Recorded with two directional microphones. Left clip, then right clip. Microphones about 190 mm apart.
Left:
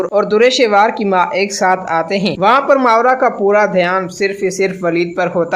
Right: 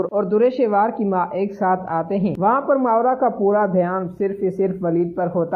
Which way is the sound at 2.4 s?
25° left (ahead or behind).